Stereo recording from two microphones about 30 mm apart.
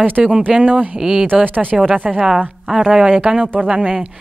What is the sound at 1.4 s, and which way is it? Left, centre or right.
Speech, right.